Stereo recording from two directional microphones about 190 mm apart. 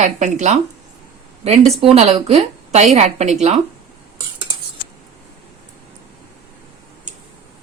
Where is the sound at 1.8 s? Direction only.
30° right (ahead or behind).